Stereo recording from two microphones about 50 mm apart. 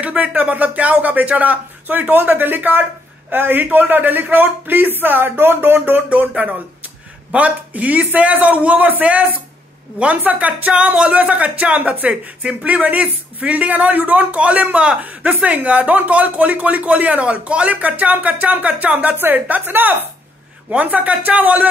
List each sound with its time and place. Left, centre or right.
0.0 s speech: right
6.0 s speech: right
19.1 s speech: right
20.7 s speech: right